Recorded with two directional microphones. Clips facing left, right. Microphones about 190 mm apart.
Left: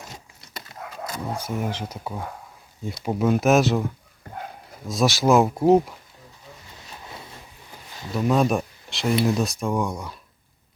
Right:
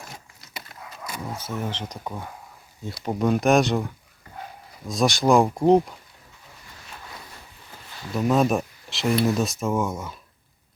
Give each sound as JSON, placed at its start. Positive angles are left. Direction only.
{"t": 1.4, "sound": "speech", "side_deg": 10}
{"t": 4.9, "sound": "speech", "side_deg": 0}
{"t": 6.9, "sound": "a sound", "side_deg": 20}
{"t": 8.1, "sound": "speech", "side_deg": 0}